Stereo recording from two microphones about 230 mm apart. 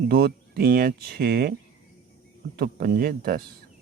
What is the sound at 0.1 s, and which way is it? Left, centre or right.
Speech, right.